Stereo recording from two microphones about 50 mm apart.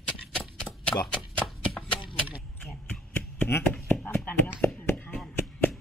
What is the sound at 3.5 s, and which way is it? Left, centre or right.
Chopping, left.